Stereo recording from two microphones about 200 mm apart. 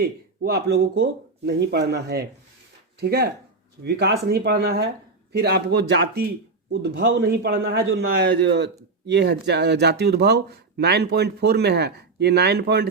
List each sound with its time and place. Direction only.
0.0 s speech: 50° right (ahead or behind)